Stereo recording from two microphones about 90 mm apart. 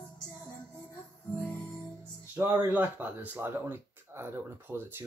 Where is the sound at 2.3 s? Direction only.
25° right (ahead or behind).